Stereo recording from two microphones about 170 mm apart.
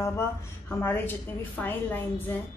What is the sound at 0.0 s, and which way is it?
A woman's voice, 15° left (ahead or behind).